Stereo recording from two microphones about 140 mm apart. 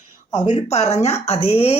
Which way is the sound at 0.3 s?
35° left (ahead or behind).